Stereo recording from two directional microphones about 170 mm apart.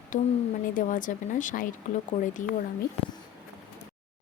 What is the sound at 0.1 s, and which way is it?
Speech, 50° left (ahead or behind).